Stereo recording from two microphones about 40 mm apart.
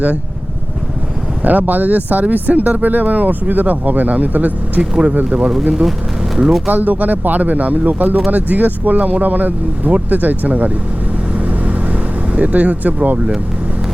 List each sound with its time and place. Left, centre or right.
1.4 s speech: right
4.8 s speech: right
6.7 s speech: right
11.3 s vehicle: right